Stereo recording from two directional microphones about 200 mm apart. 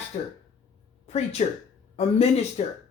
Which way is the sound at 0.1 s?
35° left (ahead or behind).